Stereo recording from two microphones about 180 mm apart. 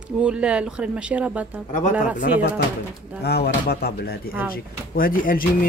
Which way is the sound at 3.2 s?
65° left (ahead or behind).